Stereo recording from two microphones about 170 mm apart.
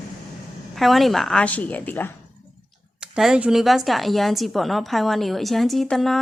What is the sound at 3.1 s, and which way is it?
A woman's voice, 5° right (ahead or behind).